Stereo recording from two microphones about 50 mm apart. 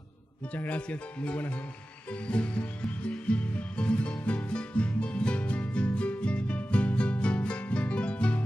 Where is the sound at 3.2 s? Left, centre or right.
Left.